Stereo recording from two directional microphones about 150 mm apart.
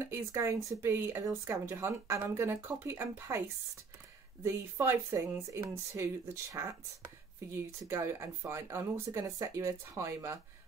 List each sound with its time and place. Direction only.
0.0 s speech: 20° right (ahead or behind)
7.9 s speech: 20° right (ahead or behind)